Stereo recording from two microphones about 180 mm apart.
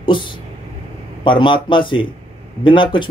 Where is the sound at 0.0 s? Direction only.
25° left (ahead or behind).